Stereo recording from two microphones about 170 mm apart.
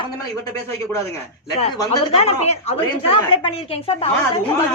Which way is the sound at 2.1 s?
40° left (ahead or behind).